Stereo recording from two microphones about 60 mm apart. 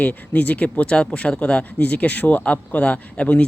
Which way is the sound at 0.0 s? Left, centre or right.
Left.